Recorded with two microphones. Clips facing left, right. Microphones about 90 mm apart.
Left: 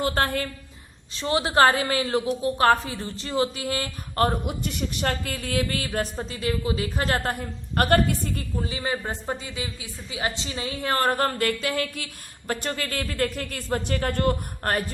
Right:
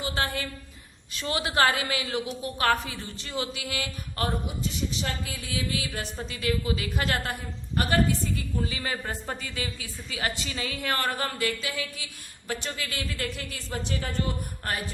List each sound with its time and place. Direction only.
0.0 s a woman's voice: 50° left (ahead or behind)
1.1 s a woman's voice: 30° left (ahead or behind)
4.4 s a woman's voice: 60° left (ahead or behind); by 7.4 s 40° left (ahead or behind)
7.8 s a woman's voice: 55° left (ahead or behind)
8.6 s a woman's voice: 25° left (ahead or behind); by 14.9 s 50° left (ahead or behind)